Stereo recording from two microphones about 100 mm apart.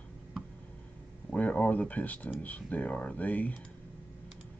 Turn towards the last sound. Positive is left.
turn(degrees=15)  # may be behind; listen again after turning